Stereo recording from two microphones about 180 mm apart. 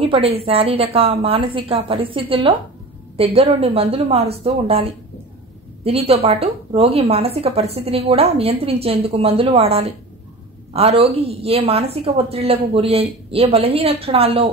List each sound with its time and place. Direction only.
0.0 s a woman's voice: 30° right (ahead or behind)
5.9 s a woman's voice: 35° right (ahead or behind)